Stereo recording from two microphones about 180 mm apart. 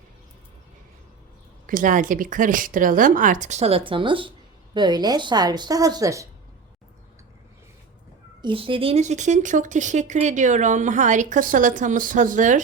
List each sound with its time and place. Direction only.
1.6 s a woman's voice: 50° right (ahead or behind); by 6.2 s 20° right (ahead or behind)
8.4 s speech: 30° right (ahead or behind); by 12.5 s 45° right (ahead or behind)